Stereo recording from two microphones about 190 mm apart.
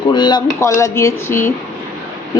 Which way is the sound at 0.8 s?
15° left (ahead or behind).